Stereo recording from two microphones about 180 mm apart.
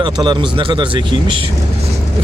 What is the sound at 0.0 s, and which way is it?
Speech, 25° right (ahead or behind).